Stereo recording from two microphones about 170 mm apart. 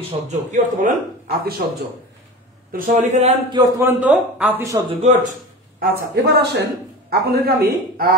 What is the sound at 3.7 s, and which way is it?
Speech, 10° right (ahead or behind).